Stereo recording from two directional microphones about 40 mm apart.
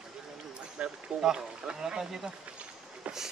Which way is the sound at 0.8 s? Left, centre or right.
Right.